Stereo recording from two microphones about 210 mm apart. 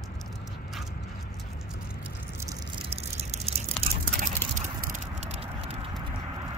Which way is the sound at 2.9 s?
30° right (ahead or behind).